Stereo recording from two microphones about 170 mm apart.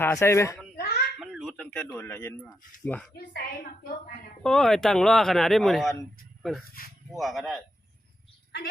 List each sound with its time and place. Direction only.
0.0 s speech: 15° left (ahead or behind)
0.8 s a sound: 70° left (ahead or behind)
1.2 s a sound: centre (ahead or behind)
1.5 s a man's voice: 10° left (ahead or behind)
3.2 s a woman's voice: 65° left (ahead or behind)
4.4 s speech: 5° left (ahead or behind)
7.1 s speech: centre (ahead or behind)